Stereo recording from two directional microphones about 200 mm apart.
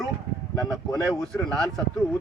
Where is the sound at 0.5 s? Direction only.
20° left (ahead or behind).